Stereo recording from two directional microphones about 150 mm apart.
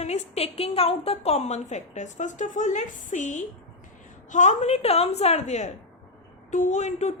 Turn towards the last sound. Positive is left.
turn(degrees=50)  # may be behind; listen again after turning